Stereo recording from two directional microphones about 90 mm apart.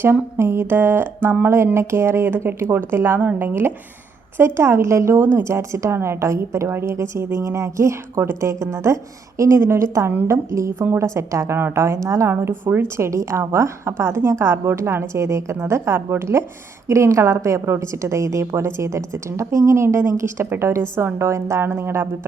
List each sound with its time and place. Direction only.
0.0 s a woman's voice: 25° right (ahead or behind)
13.1 s a woman's voice: 35° right (ahead or behind)